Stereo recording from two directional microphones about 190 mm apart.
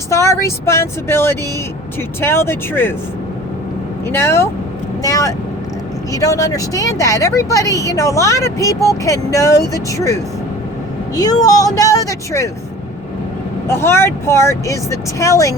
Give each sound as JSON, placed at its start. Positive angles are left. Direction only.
{"t": 0.1, "sound": "speech", "side_deg": 15}
{"t": 4.1, "sound": "speech", "side_deg": 15}
{"t": 11.1, "sound": "speech", "side_deg": 20}
{"t": 13.7, "sound": "speech", "side_deg": 15}